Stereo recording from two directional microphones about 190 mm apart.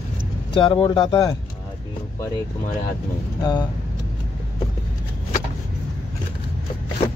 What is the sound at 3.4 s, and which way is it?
Speech, 20° left (ahead or behind).